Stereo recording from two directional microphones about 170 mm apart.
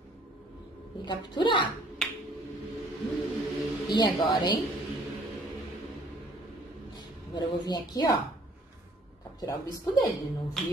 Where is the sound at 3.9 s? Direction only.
25° left (ahead or behind).